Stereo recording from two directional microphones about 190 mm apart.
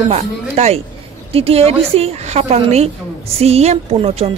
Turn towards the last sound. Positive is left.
turn(degrees=-30)  # may be behind; listen again after turning